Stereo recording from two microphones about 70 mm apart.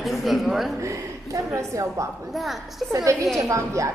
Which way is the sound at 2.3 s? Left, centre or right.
Centre.